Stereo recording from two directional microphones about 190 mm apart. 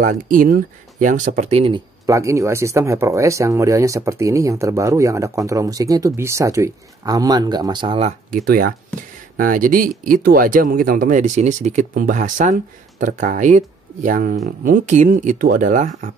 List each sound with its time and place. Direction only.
0.0 s speech: 45° right (ahead or behind)
2.0 s speech: 15° right (ahead or behind)
8.5 s speech: 50° right (ahead or behind)